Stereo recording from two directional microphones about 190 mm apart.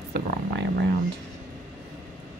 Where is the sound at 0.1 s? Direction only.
60° right (ahead or behind).